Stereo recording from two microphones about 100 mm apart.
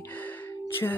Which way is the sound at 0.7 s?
20° left (ahead or behind).